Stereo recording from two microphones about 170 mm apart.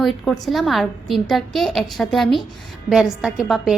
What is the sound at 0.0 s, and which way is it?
A woman's voice, centre (ahead or behind).